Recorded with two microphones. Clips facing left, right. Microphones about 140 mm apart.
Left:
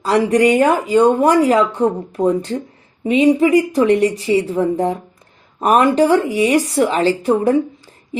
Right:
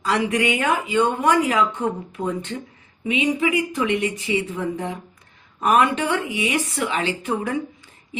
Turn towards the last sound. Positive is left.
turn(degrees=35)  # may be behind; listen again after turning